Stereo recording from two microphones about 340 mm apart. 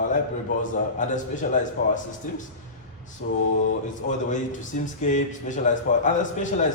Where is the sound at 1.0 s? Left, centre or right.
Left.